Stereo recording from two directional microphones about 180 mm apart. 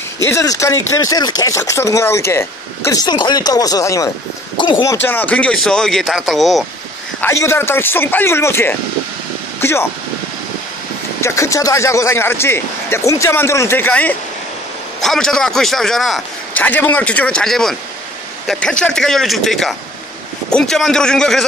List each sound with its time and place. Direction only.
0.2 s speech: 15° left (ahead or behind)
4.9 s a man's voice: 10° left (ahead or behind)
7.2 s speech: 15° left (ahead or behind)
11.1 s a man's voice: 15° left (ahead or behind)